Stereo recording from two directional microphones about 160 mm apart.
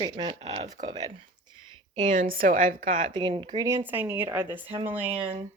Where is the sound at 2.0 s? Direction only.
55° right (ahead or behind).